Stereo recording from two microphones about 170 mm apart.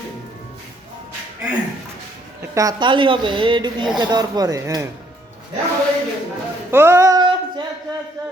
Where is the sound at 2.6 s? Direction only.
25° right (ahead or behind).